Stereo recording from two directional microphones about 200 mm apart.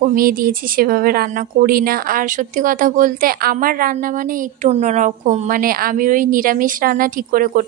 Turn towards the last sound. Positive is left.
turn(degrees=-45)  # may be behind; listen again after turning